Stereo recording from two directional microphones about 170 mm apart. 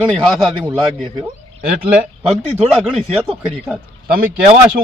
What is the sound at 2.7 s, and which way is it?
Speech, 5° right (ahead or behind).